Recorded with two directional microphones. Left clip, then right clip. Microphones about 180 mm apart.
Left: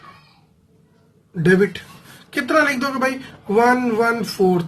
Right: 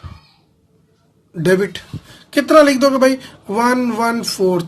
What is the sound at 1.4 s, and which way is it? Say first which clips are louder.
Speech: right 1 dB; 45° right (ahead or behind).